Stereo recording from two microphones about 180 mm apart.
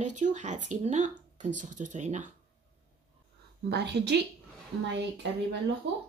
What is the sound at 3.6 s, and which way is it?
Speech, 65° right (ahead or behind).